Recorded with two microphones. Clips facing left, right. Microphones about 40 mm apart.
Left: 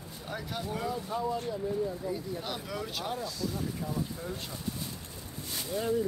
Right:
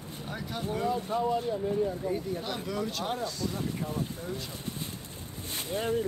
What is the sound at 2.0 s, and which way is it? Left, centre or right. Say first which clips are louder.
Speech: right 3 dB; right.